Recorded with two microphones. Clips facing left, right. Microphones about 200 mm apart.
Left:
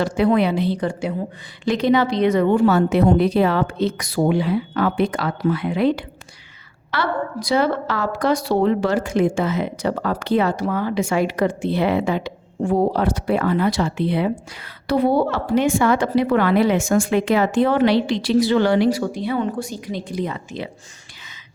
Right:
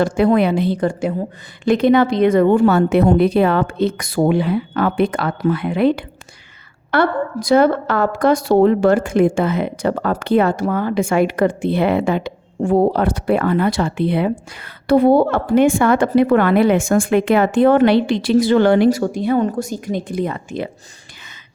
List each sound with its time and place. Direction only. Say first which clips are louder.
0.0 s a woman's voice: right 3 dB; 50° right (ahead or behind)